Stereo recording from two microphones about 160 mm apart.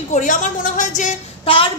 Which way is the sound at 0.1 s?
55° left (ahead or behind).